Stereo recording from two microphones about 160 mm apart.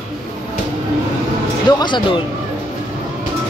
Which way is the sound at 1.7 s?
30° left (ahead or behind).